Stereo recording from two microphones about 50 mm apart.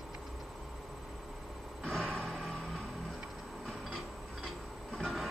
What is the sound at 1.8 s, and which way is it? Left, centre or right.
Music, centre.